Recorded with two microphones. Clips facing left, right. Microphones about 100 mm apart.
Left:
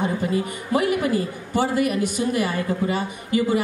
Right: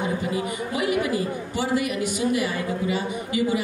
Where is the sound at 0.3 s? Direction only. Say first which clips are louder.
Left 4 dB; 45° left (ahead or behind).